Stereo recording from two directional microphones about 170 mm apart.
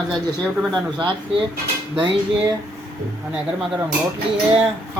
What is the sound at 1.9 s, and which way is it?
Cutlery, 25° right (ahead or behind).